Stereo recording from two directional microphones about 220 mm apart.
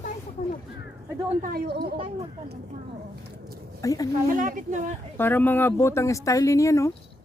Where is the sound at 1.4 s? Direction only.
40° right (ahead or behind).